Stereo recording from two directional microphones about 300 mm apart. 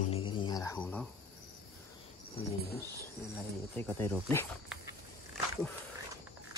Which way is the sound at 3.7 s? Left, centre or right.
Centre.